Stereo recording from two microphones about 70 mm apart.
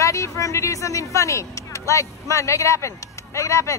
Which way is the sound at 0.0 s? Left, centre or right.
Left.